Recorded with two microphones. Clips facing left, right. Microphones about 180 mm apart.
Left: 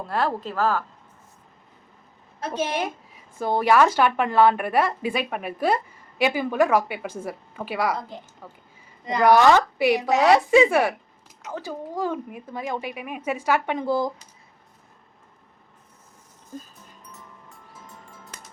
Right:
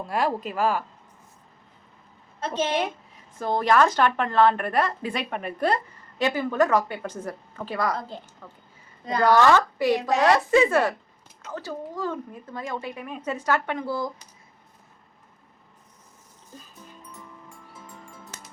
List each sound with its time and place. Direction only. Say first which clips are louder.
0.0 s a woman's voice: even; 10° right (ahead or behind)
2.4 s a woman's voice: right 1 dB; 10° left (ahead or behind)
9.0 s a woman's voice: left 2 dB; 15° left (ahead or behind)